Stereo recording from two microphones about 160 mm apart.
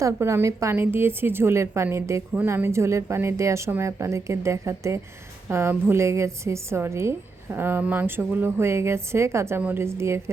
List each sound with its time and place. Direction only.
0.0 s a woman's voice: 15° right (ahead or behind)